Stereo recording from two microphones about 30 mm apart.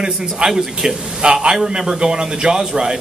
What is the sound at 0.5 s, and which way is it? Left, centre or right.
A man's voice, centre.